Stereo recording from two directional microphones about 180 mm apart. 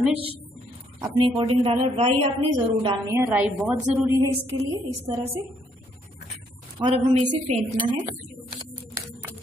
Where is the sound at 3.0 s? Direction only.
10° right (ahead or behind).